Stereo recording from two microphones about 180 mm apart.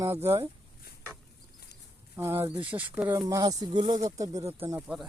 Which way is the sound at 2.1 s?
15° right (ahead or behind).